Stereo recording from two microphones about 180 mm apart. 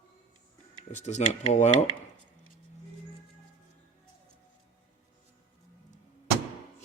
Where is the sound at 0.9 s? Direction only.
40° left (ahead or behind).